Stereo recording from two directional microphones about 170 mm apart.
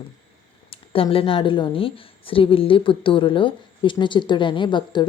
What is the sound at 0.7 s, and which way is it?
A woman's voice, 35° left (ahead or behind).